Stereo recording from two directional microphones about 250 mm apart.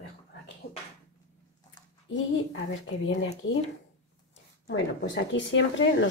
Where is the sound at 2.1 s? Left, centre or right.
Left.